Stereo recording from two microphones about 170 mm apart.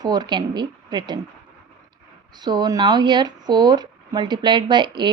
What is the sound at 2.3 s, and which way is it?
Speech, 25° right (ahead or behind).